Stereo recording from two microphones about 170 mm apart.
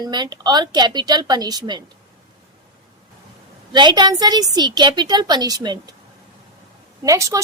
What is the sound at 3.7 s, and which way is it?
A woman's voice, 25° right (ahead or behind).